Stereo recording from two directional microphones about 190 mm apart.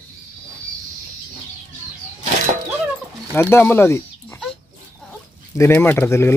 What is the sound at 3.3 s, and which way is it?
Speech, 10° left (ahead or behind).